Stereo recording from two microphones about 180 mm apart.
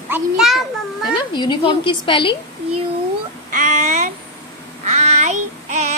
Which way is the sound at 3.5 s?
45° right (ahead or behind).